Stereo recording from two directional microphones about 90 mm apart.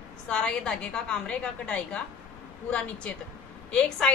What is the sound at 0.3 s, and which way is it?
A woman's voice, 10° left (ahead or behind).